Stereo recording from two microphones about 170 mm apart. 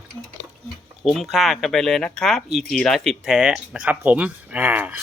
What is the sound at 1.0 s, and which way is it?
Speech, centre (ahead or behind).